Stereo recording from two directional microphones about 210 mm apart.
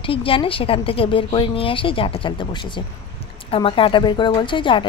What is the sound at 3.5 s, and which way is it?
Speech, 25° left (ahead or behind).